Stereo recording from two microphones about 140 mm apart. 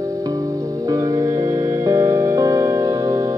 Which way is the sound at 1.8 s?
20° right (ahead or behind).